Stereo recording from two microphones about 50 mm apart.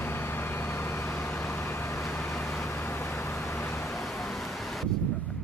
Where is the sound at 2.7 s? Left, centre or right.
Left.